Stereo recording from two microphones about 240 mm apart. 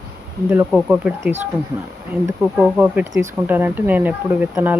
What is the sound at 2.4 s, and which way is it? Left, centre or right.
Speech, centre.